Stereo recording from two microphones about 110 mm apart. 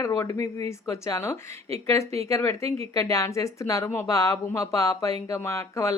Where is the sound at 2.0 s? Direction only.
70° right (ahead or behind).